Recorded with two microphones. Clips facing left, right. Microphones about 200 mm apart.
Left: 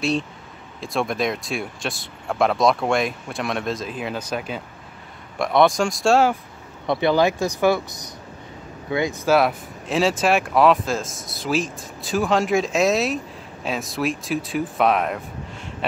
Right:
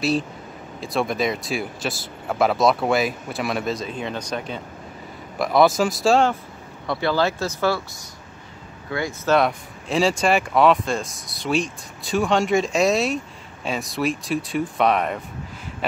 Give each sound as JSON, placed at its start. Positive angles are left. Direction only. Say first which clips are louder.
{"t": 0.7, "sound": "speech", "louder": "even", "side_deg": 0}
{"t": 6.9, "sound": "speech", "louder": "left 3 dB", "side_deg": 20}
{"t": 9.3, "sound": "speech", "louder": "even", "side_deg": 5}